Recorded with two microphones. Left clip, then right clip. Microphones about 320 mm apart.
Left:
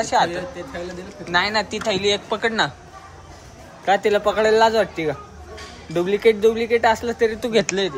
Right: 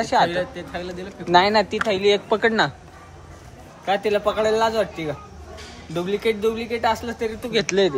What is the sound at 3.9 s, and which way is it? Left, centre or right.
Speech, centre.